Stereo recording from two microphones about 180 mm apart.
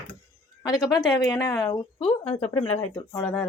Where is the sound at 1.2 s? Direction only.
15° left (ahead or behind); by 2.9 s 35° left (ahead or behind).